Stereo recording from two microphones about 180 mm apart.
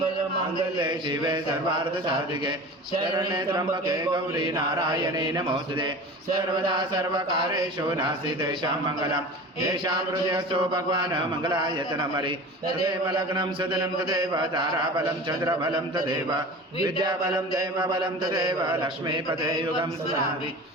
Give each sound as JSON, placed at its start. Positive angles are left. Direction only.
{"t": 0.8, "sound": "mantra", "side_deg": -25}
{"t": 3.0, "sound": "mantra", "side_deg": -25}
{"t": 9.6, "sound": "mantra", "side_deg": -25}